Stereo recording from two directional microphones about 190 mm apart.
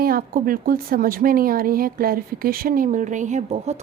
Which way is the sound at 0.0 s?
50° right (ahead or behind).